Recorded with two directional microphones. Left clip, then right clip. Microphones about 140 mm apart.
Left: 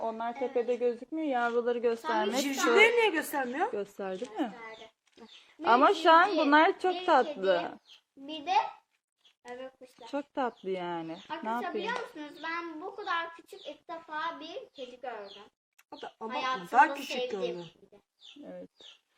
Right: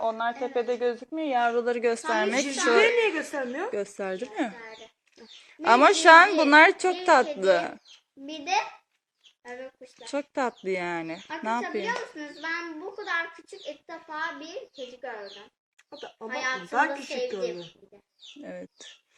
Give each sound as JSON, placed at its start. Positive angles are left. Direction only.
{"t": 0.0, "sound": "speech", "side_deg": 25}
{"t": 1.5, "sound": "speech", "side_deg": 5}
{"t": 3.0, "sound": "a woman's voice", "side_deg": 10}
{"t": 3.9, "sound": "speech", "side_deg": 0}
{"t": 8.3, "sound": "a child's voice", "side_deg": -20}
{"t": 10.0, "sound": "speech", "side_deg": 0}
{"t": 13.8, "sound": "speech", "side_deg": 0}
{"t": 15.9, "sound": "a woman's voice", "side_deg": 15}
{"t": 16.2, "sound": "speech", "side_deg": -5}
{"t": 16.6, "sound": "a woman's voice", "side_deg": 10}
{"t": 18.4, "sound": "a child's voice", "side_deg": -20}